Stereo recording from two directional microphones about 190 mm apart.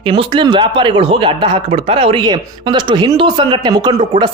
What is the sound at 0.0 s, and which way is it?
Speech, 25° right (ahead or behind).